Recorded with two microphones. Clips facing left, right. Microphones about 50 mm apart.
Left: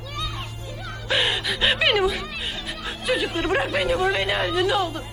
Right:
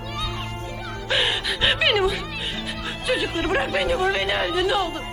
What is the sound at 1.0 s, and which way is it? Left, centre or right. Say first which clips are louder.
Speech: even; centre.